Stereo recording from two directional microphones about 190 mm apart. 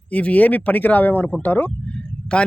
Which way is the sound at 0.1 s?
5° left (ahead or behind).